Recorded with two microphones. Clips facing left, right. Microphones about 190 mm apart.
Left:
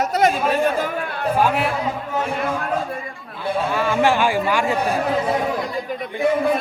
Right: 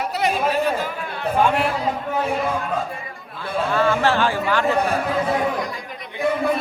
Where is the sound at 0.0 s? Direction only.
45° left (ahead or behind).